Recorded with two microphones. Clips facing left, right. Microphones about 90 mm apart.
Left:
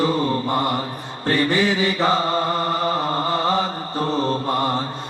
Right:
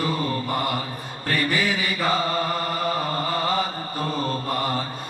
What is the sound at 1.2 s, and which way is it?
Mantra, 30° left (ahead or behind).